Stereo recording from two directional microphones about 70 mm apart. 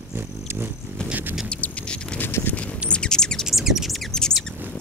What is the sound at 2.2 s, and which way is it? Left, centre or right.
Clip-clop, left.